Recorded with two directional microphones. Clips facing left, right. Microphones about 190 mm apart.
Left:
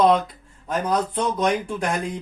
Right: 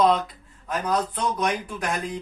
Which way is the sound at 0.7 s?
25° left (ahead or behind).